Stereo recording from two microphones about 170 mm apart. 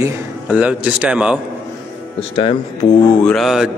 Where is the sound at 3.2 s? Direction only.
Centre (ahead or behind).